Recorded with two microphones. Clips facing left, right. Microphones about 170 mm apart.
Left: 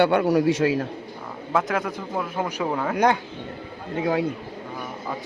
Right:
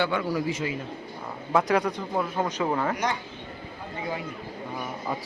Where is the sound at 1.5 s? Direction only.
Centre (ahead or behind).